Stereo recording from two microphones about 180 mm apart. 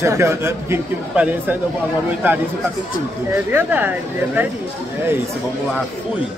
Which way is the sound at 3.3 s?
10° right (ahead or behind).